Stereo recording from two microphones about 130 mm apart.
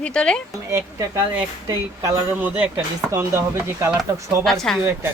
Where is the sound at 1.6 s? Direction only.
25° right (ahead or behind).